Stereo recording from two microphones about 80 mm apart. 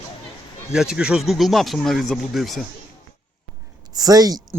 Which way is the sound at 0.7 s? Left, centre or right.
Centre.